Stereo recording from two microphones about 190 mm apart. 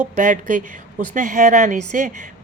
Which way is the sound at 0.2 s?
40° right (ahead or behind).